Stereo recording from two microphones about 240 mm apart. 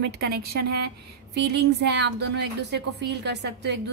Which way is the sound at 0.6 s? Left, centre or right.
Right.